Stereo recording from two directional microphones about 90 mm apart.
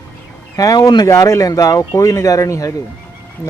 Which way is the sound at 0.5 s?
40° left (ahead or behind).